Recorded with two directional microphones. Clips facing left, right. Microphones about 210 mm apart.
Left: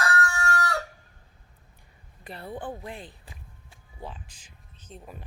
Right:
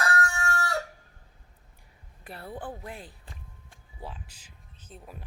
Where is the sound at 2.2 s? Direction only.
5° right (ahead or behind).